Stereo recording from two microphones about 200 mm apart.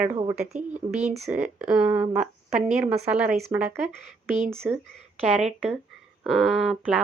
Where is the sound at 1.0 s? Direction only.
Centre (ahead or behind).